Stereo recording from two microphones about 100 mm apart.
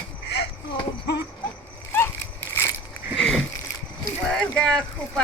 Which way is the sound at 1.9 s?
20° left (ahead or behind).